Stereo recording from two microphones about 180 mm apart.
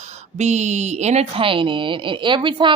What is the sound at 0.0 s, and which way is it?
Speech, 40° right (ahead or behind).